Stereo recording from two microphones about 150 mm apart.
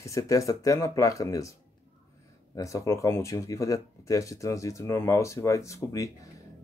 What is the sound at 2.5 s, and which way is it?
Speech, 20° left (ahead or behind).